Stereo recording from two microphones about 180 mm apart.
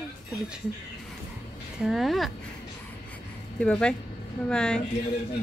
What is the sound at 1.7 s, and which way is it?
Speech, centre (ahead or behind).